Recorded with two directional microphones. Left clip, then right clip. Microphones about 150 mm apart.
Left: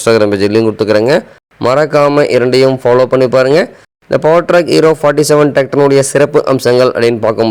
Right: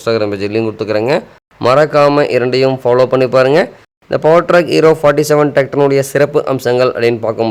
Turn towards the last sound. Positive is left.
turn(degrees=30)  # may be behind; listen again after turning